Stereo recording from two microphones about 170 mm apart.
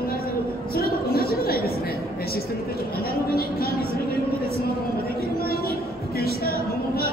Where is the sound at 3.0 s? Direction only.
65° left (ahead or behind).